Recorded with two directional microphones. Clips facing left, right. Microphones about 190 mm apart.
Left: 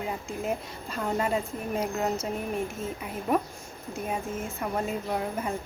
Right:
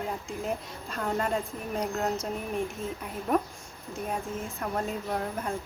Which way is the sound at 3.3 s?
5° left (ahead or behind).